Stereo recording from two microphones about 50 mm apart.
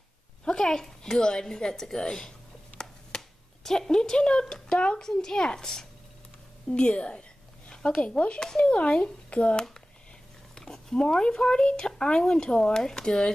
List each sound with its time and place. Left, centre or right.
0.5 s a woman's voice: centre
4.7 s a child's voice: left
5.0 s a woman's voice: centre
10.5 s a woman's voice: centre